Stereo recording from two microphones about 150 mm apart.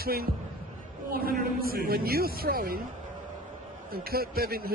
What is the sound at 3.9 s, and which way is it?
Speech, 90° right.